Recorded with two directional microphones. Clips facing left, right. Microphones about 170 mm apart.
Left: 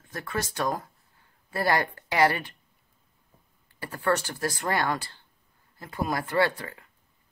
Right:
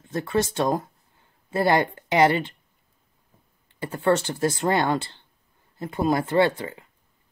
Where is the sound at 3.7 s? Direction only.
25° right (ahead or behind).